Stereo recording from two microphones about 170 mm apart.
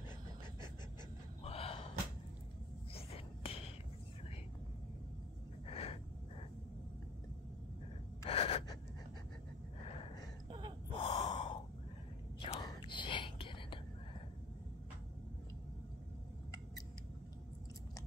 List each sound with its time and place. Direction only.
1.4 s gasp: 35° left (ahead or behind)
2.9 s a sound: 35° left (ahead or behind)
5.7 s gasp: 35° left (ahead or behind)
8.3 s gasp: 35° left (ahead or behind)
10.9 s gasp: 30° left (ahead or behind)
12.5 s whispering: 25° left (ahead or behind)